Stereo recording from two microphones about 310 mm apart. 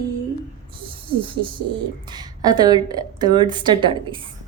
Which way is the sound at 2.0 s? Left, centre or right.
Centre.